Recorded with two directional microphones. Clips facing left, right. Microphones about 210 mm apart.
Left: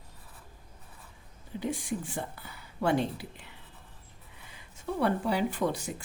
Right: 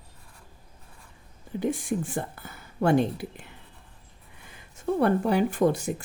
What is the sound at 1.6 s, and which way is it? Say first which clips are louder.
Speech: right 6 dB; 50° right (ahead or behind).